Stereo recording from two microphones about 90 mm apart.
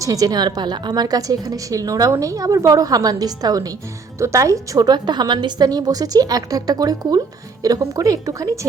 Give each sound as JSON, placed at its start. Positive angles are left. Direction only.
{"t": 0.0, "sound": "a woman's voice", "side_deg": -40}